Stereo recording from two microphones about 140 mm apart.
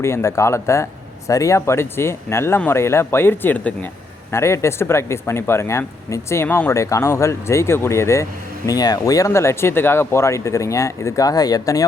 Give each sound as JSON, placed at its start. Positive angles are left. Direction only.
{"t": 0.0, "sound": "speech", "side_deg": 20}